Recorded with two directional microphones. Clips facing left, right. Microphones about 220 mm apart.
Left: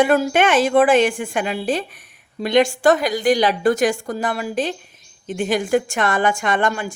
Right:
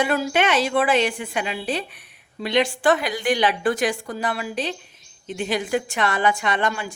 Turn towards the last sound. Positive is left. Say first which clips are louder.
# left 4 dB
turn(degrees=50)  # may be behind; listen again after turning